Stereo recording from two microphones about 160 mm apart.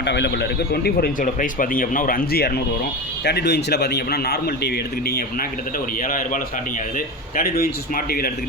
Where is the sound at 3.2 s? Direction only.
90° left.